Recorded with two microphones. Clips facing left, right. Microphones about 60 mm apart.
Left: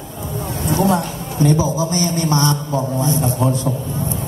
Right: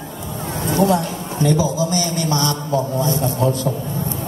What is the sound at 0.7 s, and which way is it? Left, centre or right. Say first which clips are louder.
A man's voice: right 1 dB; left.